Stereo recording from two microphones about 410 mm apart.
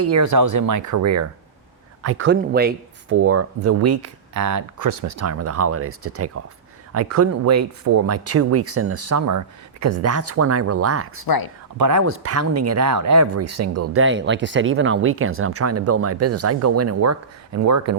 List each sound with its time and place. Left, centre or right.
0.0 s speech: right
11.3 s speech: left
11.8 s speech: right